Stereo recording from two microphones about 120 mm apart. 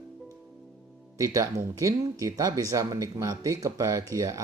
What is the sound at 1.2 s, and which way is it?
Speech, 30° right (ahead or behind).